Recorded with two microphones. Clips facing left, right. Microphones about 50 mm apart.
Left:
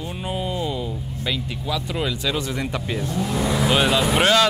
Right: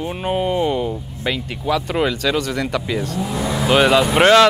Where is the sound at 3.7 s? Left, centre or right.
Right.